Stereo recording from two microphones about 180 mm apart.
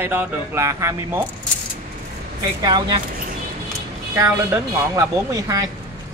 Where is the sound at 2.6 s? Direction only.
25° right (ahead or behind).